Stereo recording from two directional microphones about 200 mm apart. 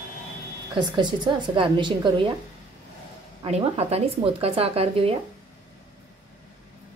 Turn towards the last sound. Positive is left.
turn(degrees=-30)  # may be behind; listen again after turning